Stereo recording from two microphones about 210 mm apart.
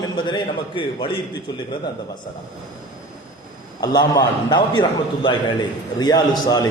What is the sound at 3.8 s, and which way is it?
A man's voice, 20° left (ahead or behind).